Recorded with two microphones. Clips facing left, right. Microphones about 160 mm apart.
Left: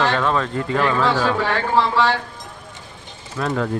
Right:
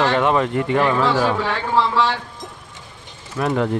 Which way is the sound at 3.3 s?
15° right (ahead or behind).